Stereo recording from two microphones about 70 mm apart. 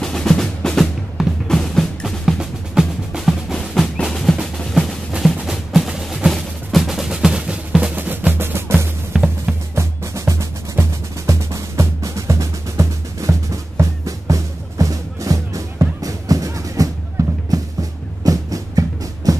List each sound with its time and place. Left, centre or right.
0.0 s music: centre
3.7 s percussion: centre
4.7 s music: centre
7.9 s music: right
9.1 s music: centre
9.8 s music: right